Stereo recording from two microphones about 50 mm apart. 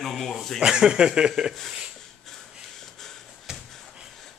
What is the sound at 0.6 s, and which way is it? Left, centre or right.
Speech, centre.